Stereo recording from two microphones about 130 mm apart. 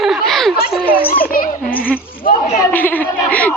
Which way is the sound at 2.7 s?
15° left (ahead or behind).